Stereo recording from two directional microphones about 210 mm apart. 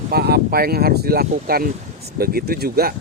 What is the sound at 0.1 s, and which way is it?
Speech, 50° right (ahead or behind).